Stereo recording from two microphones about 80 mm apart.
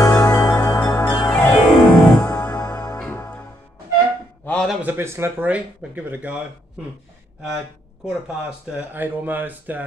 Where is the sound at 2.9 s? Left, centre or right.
Left.